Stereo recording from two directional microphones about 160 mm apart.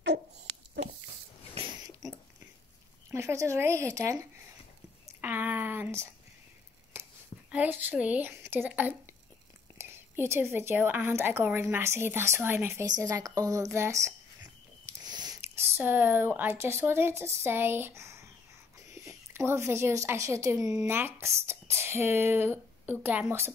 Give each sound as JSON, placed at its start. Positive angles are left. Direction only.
{"t": 3.1, "sound": "speech", "side_deg": -20}
{"t": 5.0, "sound": "a sound", "side_deg": -10}
{"t": 7.5, "sound": "a woman's voice", "side_deg": -10}